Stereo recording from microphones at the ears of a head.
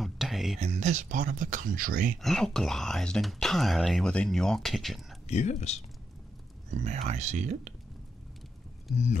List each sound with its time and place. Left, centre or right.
0.0 s a sound: centre
0.6 s speech: right
2.2 s speech: centre
5.3 s speech: left
6.7 s speech: right